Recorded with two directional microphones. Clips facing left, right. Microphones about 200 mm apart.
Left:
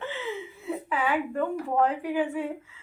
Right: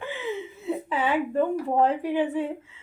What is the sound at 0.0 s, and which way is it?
Chuckle, 15° right (ahead or behind).